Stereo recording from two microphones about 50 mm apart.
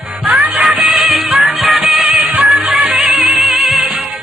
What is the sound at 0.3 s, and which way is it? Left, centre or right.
Music, centre.